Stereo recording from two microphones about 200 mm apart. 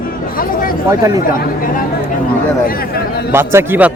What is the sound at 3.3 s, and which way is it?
Speech, 15° right (ahead or behind).